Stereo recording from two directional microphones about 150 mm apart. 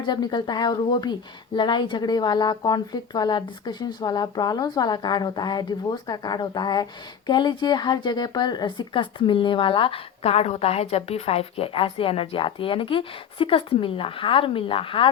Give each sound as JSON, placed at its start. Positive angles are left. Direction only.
{"t": 0.0, "sound": "speech", "side_deg": 30}